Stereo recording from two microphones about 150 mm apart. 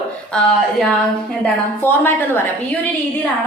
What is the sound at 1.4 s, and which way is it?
A woman's voice, 15° left (ahead or behind).